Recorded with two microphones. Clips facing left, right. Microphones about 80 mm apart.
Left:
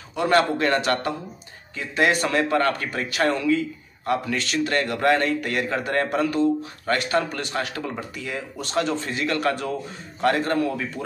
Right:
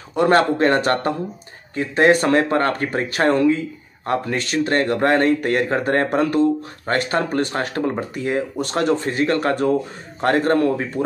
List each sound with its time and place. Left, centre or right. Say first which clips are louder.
0.1 s speech: right 4 dB; right